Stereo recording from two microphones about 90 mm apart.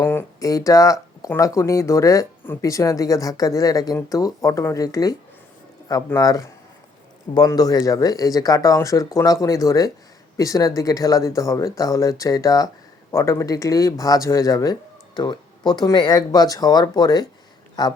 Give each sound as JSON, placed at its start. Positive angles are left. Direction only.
{"t": 0.0, "sound": "a sound", "side_deg": 25}
{"t": 0.3, "sound": "speech", "side_deg": 40}
{"t": 6.1, "sound": "speech", "side_deg": 40}